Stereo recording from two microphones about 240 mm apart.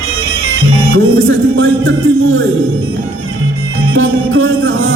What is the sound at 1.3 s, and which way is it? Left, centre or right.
Music, right.